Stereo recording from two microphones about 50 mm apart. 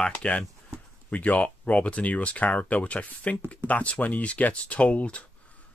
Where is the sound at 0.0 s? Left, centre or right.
Left.